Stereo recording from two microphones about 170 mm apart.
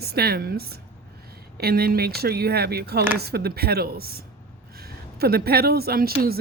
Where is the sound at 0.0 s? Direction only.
70° right (ahead or behind).